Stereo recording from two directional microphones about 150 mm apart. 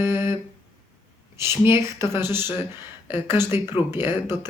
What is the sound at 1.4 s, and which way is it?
Speech, 15° right (ahead or behind).